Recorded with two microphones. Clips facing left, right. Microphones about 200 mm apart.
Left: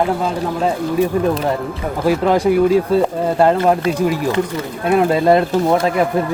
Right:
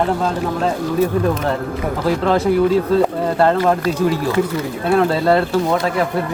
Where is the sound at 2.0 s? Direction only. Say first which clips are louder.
Left 2 dB; 15° left (ahead or behind).